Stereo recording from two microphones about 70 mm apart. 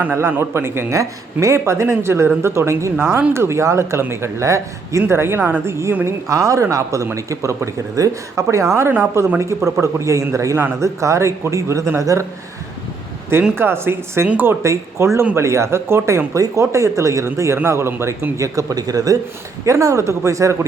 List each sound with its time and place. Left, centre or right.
0.0 s speech: right
0.9 s speech: right
5.6 s speech: right
6.2 s speech: right
13.6 s speech: right
14.6 s speech: right
18.3 s speech: right
19.6 s speech: right